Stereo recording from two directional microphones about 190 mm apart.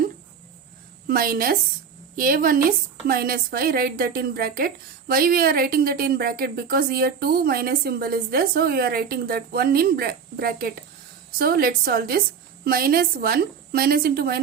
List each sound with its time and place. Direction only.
1.0 s a woman's voice: 50° right (ahead or behind)